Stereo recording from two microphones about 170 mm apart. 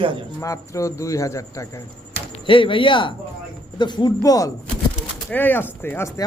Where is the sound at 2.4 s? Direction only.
30° left (ahead or behind).